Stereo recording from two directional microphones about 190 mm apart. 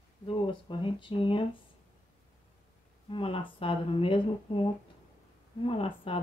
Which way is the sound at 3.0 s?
30° left (ahead or behind).